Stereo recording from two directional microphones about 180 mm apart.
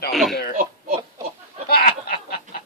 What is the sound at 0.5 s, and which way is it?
Throat clearing, 55° right (ahead or behind).